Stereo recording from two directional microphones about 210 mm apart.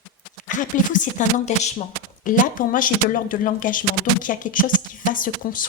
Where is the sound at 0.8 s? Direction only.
35° left (ahead or behind).